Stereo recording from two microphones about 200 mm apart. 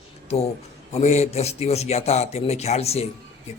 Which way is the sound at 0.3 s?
30° left (ahead or behind).